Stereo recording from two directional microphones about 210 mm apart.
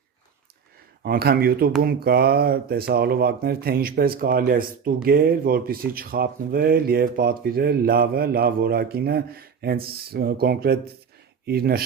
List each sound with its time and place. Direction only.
1.0 s speech: 45° right (ahead or behind)